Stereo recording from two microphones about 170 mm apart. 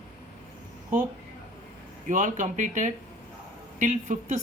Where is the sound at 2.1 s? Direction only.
45° right (ahead or behind).